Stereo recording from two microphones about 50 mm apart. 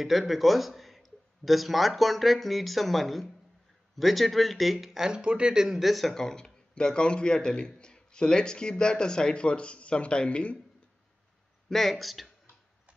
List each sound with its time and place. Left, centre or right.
0.0 s speech: centre
5.8 s a man's voice: centre; by 10.6 s left
11.7 s speech: centre